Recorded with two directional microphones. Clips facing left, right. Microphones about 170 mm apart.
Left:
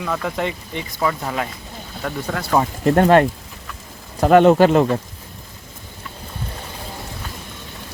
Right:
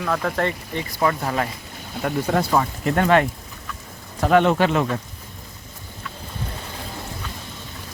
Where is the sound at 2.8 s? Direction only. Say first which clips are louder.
Left 6 dB; 40° left (ahead or behind).